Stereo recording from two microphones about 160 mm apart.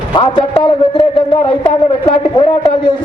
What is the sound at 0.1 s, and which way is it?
Speech, 30° left (ahead or behind).